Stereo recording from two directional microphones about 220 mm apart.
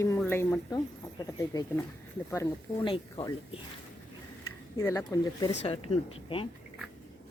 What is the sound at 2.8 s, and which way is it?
Speech, 25° left (ahead or behind).